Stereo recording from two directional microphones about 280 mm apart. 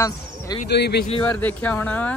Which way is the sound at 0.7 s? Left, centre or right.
Left.